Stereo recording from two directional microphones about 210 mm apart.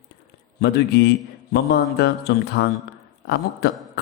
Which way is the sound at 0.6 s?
50° left (ahead or behind).